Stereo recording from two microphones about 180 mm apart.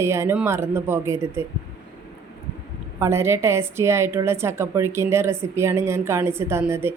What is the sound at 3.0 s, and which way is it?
A woman's voice, 15° right (ahead or behind).